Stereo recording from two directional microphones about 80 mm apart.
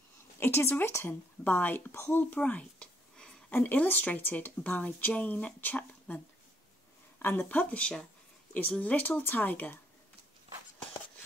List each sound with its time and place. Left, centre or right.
0.4 s speech: left
1.4 s speech: centre
2.3 s a sound: centre
3.5 s speech: left